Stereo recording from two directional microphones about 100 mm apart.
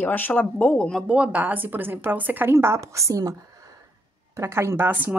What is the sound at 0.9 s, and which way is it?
A woman's voice, 5° right (ahead or behind).